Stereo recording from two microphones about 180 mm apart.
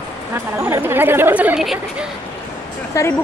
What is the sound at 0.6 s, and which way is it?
Speech, 15° right (ahead or behind).